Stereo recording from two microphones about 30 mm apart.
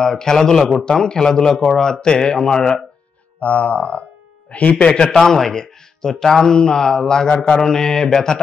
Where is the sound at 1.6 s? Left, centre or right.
Centre.